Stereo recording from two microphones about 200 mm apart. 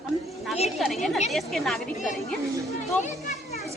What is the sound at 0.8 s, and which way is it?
A woman's voice, centre (ahead or behind).